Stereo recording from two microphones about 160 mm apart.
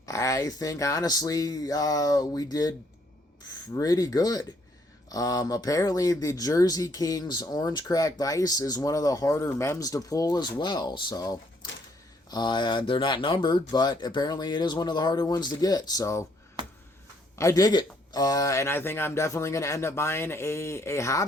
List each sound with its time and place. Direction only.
0.0 s speech: 20° left (ahead or behind)
17.3 s speech: 20° left (ahead or behind)